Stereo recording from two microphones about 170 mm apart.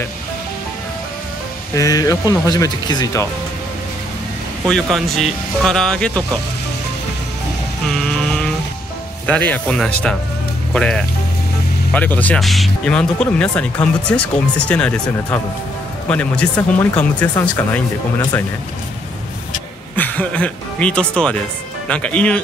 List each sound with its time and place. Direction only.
1.8 s speech: 20° left (ahead or behind)
4.6 s speech: centre (ahead or behind)
7.9 s vehicle: 5° left (ahead or behind)
9.2 s speech: 10° left (ahead or behind)
16.1 s speech: 5° left (ahead or behind)
20.0 s speech: 10° left (ahead or behind)